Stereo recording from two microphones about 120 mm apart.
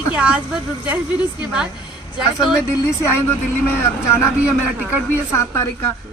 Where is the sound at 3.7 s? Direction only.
20° left (ahead or behind).